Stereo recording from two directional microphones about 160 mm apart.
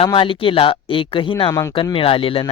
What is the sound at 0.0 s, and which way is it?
Speech, 35° left (ahead or behind).